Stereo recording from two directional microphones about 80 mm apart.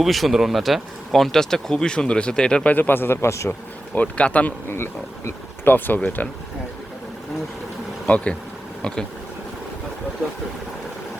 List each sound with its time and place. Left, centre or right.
0.0 s speech: centre
2.7 s speech: left
3.9 s speech: centre
4.7 s speech: left
8.0 s speech: centre